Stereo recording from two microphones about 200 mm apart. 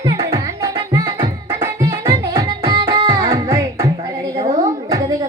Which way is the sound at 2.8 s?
25° right (ahead or behind).